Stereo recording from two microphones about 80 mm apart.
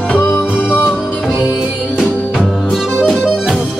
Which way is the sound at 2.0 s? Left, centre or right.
Centre.